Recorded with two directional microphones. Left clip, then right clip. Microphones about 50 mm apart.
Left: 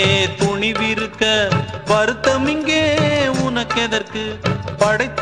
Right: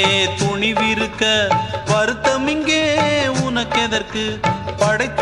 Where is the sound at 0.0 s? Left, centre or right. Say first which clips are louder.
Even; left.